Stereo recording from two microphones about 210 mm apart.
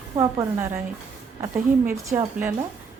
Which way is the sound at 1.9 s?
10° right (ahead or behind).